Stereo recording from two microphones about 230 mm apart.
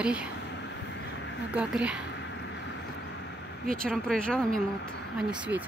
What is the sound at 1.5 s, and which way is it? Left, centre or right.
Speech, centre.